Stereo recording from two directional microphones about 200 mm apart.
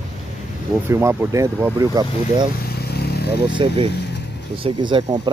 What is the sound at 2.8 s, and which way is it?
Motorcycle, 55° left (ahead or behind).